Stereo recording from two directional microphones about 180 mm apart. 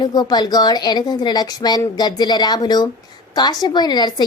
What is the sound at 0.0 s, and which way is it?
A woman's voice, 20° left (ahead or behind).